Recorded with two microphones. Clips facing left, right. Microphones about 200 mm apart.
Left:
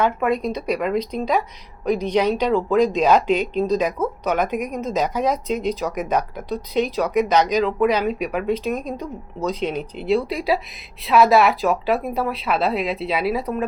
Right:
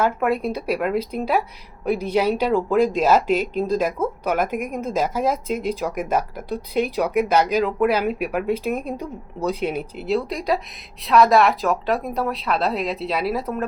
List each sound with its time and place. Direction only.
0.0 s a woman's voice: 5° right (ahead or behind)